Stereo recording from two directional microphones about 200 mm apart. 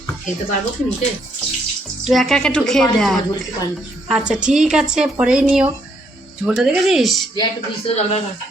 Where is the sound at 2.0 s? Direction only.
Centre (ahead or behind).